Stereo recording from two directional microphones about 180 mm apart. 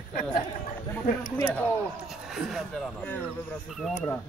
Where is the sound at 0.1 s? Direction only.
50° left (ahead or behind).